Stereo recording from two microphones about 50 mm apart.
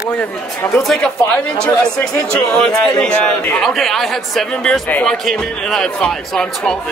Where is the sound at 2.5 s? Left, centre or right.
Centre.